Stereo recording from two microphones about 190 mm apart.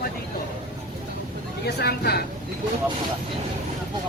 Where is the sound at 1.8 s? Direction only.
55° left (ahead or behind).